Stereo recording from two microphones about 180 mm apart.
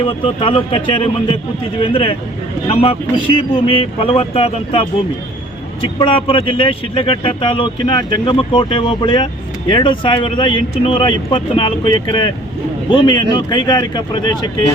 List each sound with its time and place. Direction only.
0.0 s speech: 30° left (ahead or behind)